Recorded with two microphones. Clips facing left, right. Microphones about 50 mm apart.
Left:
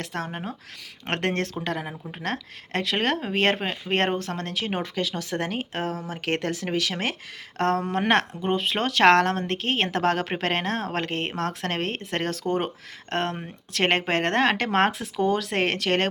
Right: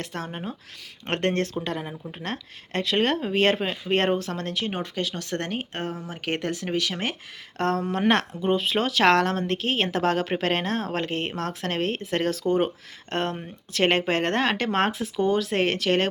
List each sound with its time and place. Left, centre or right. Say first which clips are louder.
0.0 s speech: left 1 dB; left
3.2 s speech: right 1 dB; left
4.4 s speech: even; left
5.3 s speech: left 1 dB; left
6.0 s speech: left 1 dB; left
7.6 s speech: even; left
8.4 s speech: right 1 dB; left
10.9 s speech: even; left
13.7 s speech: right 1 dB; left